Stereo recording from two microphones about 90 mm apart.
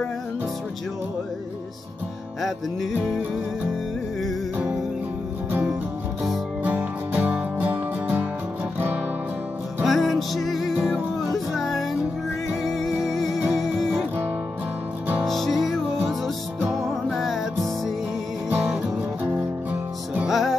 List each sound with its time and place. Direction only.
2.4 s music: centre (ahead or behind)
6.6 s music: 20° right (ahead or behind)
9.8 s music: centre (ahead or behind)
15.2 s music: centre (ahead or behind)
16.8 s music: centre (ahead or behind)
19.2 s music: 15° right (ahead or behind)
20.2 s music: centre (ahead or behind)